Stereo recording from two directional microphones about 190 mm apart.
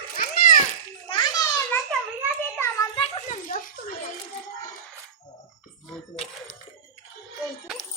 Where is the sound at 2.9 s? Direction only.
40° left (ahead or behind).